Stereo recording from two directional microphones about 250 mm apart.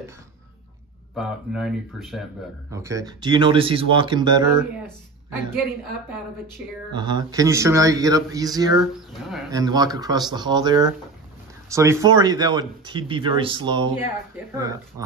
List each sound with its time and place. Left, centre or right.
1.1 s speech: centre
2.7 s speech: centre
6.9 s speech: centre